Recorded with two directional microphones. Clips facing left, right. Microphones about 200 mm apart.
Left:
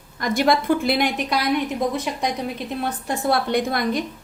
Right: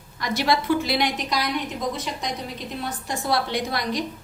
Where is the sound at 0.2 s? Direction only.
50° left (ahead or behind).